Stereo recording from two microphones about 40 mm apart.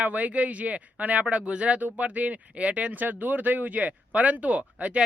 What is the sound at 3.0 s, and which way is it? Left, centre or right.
Speech, right.